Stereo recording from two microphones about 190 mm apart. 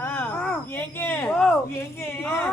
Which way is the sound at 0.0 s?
10° left (ahead or behind).